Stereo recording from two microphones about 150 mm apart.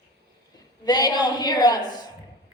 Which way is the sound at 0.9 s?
25° left (ahead or behind).